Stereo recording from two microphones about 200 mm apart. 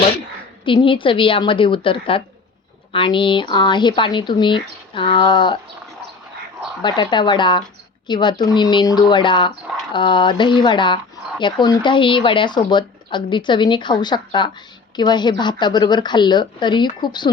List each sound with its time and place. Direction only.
0.6 s speech: 25° left (ahead or behind)
6.8 s speech: 20° left (ahead or behind)